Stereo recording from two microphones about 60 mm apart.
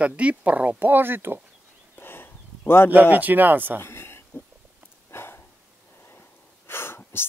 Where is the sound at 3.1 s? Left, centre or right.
Right.